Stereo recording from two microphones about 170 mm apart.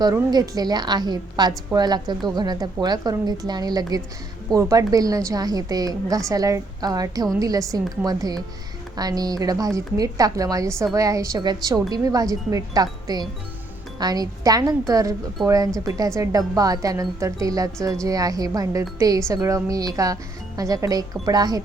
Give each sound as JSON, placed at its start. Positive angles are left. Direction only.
{"t": 0.0, "sound": "a woman's voice", "side_deg": -25}